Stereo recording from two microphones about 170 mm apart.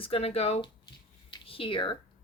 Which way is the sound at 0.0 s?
35° left (ahead or behind).